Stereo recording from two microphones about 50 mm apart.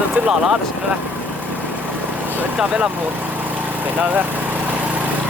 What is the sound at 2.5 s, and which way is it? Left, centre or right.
Vehicle, right.